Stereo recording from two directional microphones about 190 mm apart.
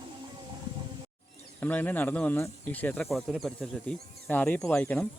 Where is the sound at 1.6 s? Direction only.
10° left (ahead or behind).